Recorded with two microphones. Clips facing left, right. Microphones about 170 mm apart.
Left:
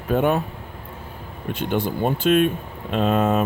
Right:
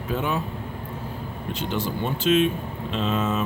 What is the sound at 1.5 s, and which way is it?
Speech, 55° left (ahead or behind).